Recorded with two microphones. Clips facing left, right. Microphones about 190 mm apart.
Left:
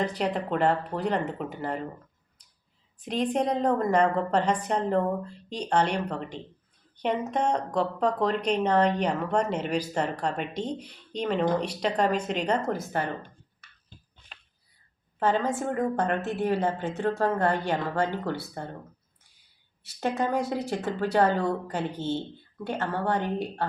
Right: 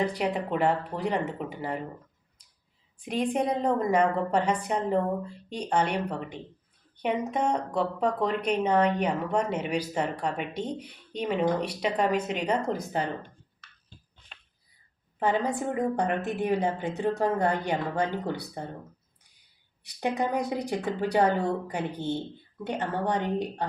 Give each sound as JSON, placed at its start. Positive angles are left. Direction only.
{"t": 0.0, "sound": "a woman's voice", "side_deg": -10}
{"t": 3.0, "sound": "a woman's voice", "side_deg": -10}
{"t": 15.2, "sound": "a woman's voice", "side_deg": -15}
{"t": 19.8, "sound": "a woman's voice", "side_deg": -15}